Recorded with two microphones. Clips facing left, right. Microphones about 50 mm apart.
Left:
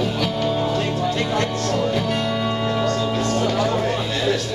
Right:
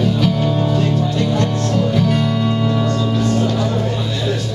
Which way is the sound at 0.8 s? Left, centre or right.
Left.